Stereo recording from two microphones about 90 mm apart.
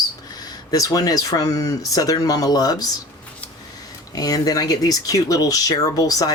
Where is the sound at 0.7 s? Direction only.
40° left (ahead or behind).